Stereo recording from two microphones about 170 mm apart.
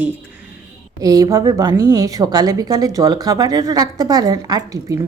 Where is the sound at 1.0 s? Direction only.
20° right (ahead or behind).